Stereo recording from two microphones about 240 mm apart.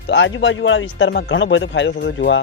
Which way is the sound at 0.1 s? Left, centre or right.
Left.